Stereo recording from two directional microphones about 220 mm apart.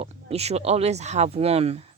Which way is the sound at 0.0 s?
25° right (ahead or behind).